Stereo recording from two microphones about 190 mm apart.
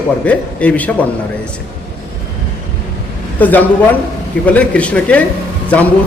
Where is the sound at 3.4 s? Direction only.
10° left (ahead or behind).